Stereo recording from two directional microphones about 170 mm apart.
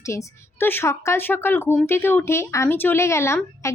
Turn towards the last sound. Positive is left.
turn(degrees=15)  # may be behind; listen again after turning